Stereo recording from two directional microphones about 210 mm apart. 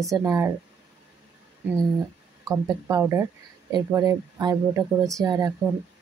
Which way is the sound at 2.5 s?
15° right (ahead or behind).